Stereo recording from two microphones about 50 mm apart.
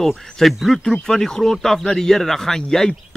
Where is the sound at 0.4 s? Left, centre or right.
Centre.